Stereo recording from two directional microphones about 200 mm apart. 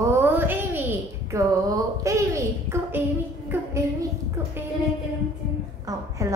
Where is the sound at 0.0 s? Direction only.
10° right (ahead or behind).